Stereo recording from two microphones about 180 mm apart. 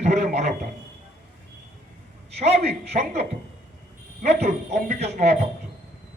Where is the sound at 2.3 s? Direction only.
35° right (ahead or behind).